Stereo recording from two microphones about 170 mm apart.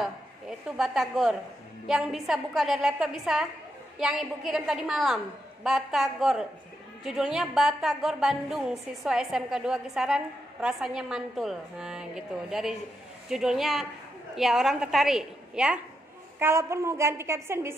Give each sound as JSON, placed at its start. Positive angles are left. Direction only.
{"t": 0.0, "sound": "a woman's voice", "side_deg": -5}